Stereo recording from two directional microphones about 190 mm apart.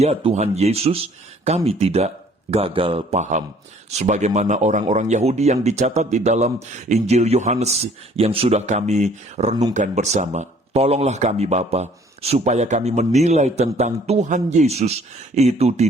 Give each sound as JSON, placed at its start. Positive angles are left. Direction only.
{"t": 0.0, "sound": "speech", "side_deg": -30}